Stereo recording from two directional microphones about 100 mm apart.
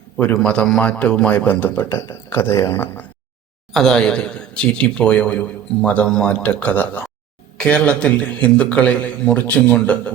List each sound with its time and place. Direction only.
0.3 s speech: 10° left (ahead or behind)
3.7 s speech: 5° left (ahead or behind)